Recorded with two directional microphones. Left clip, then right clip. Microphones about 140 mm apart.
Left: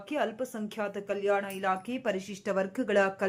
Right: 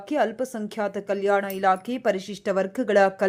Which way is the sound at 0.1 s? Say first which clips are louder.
Right 7 dB; 40° right (ahead or behind).